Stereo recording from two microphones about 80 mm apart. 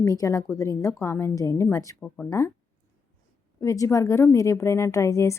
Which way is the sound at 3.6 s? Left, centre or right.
Left.